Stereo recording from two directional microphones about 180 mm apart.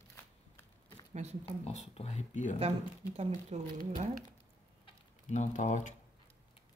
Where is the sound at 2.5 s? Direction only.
35° right (ahead or behind).